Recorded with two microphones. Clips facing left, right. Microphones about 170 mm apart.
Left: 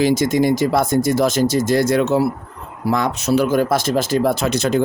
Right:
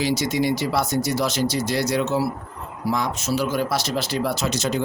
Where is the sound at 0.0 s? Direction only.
50° left (ahead or behind).